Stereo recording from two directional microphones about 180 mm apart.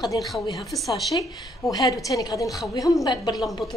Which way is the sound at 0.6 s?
Centre (ahead or behind).